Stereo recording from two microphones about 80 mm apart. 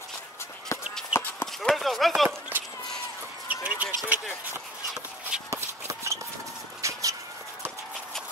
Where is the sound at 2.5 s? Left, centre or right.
Right.